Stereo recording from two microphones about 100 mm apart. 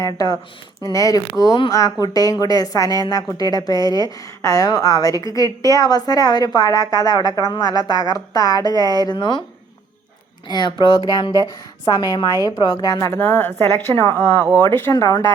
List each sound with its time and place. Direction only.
0.0 s a woman's voice: 40° left (ahead or behind)
10.5 s a woman's voice: 45° left (ahead or behind)
13.1 s speech: 20° left (ahead or behind)
14.9 s a woman's voice: 40° left (ahead or behind)